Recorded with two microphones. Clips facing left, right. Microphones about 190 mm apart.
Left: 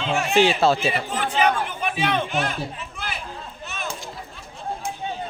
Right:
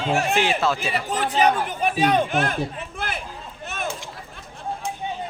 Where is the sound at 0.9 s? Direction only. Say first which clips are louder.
Right 1 dB; 40° right (ahead or behind).